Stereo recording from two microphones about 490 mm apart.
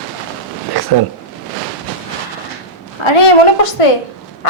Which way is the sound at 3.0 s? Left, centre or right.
Left.